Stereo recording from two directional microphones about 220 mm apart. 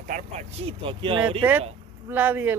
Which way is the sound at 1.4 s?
5° right (ahead or behind).